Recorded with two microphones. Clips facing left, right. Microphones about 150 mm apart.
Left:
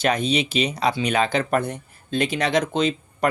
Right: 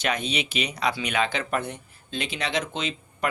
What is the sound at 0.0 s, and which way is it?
Speech, 35° left (ahead or behind).